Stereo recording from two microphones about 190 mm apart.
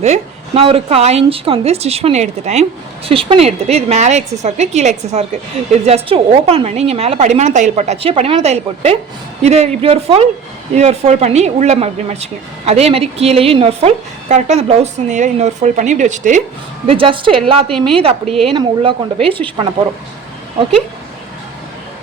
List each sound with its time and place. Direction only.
0.0 s speech: 35° right (ahead or behind)
16.8 s a woman's voice: 30° right (ahead or behind)
17.7 s a woman's voice: centre (ahead or behind)
17.9 s a woman's voice: 30° right (ahead or behind)